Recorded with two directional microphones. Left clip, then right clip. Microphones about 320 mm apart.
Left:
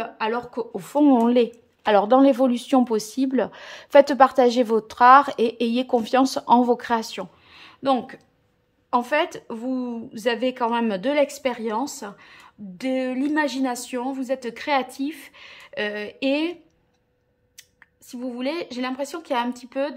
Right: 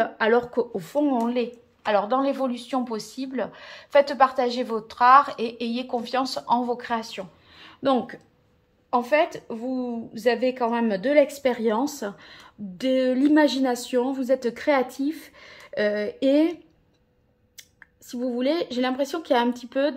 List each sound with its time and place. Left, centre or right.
0.0 s speech: centre
7.5 s speech: centre
17.6 s speech: centre